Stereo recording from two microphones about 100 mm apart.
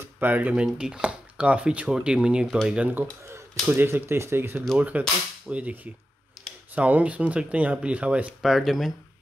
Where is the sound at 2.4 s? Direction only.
Centre (ahead or behind).